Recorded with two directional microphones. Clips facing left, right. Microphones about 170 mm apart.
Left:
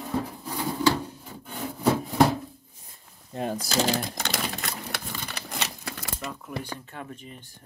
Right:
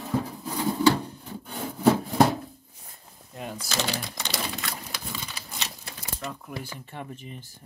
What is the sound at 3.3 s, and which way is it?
Typewriter, 40° left (ahead or behind).